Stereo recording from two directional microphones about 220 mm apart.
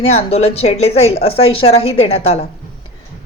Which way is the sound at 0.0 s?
30° left (ahead or behind).